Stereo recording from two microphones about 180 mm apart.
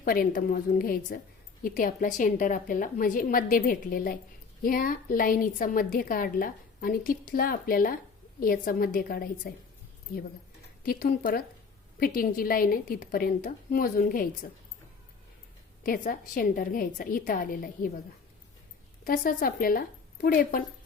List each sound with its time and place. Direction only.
0.0 s a woman's voice: 50° left (ahead or behind)
10.8 s a woman's voice: 50° left (ahead or behind)
15.8 s a woman's voice: 50° left (ahead or behind)
19.0 s a woman's voice: 50° left (ahead or behind)